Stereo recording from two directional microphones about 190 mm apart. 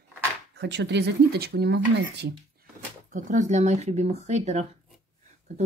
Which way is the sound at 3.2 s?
40° right (ahead or behind).